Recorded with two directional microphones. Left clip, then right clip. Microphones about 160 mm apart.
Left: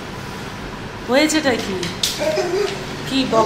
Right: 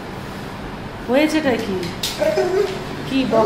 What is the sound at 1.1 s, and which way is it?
Speech, 5° right (ahead or behind).